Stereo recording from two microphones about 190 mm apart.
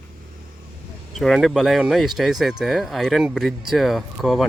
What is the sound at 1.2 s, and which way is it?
Speech, centre (ahead or behind).